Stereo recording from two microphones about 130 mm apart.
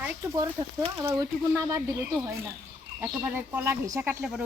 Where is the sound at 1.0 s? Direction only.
20° right (ahead or behind).